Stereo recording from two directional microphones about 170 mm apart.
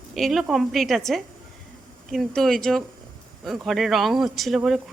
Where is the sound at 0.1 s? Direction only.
Centre (ahead or behind).